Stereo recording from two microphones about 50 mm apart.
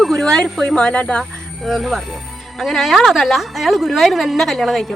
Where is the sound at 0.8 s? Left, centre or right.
Left.